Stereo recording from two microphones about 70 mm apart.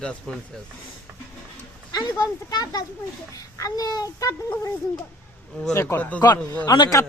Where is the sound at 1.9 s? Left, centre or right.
Left.